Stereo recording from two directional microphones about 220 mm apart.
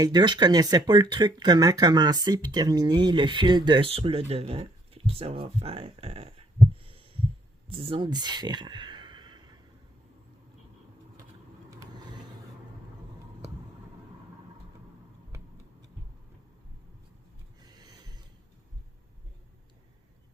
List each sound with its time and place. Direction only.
0.0 s speech: 20° right (ahead or behind)
6.8 s heart sounds: 25° right (ahead or behind)
7.7 s speech: 25° right (ahead or behind)